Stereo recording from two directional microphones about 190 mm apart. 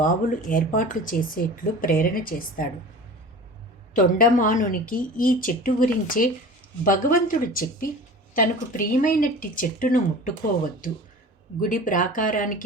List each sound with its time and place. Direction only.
0.0 s speech: 45° left (ahead or behind)
3.9 s speech: 45° left (ahead or behind)
11.6 s speech: 45° left (ahead or behind)